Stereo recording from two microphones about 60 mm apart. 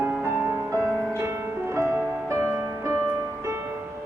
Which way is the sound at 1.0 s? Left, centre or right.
Right.